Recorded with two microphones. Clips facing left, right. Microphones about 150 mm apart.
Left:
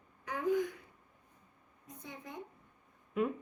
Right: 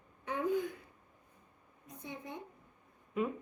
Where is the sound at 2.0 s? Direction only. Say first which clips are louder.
Right 3 dB; 25° right (ahead or behind).